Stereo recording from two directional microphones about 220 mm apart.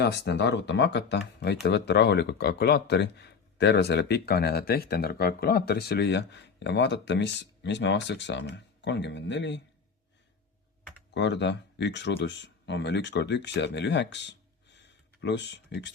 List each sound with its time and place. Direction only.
0.0 s speech: 50° left (ahead or behind)
11.1 s speech: 50° left (ahead or behind)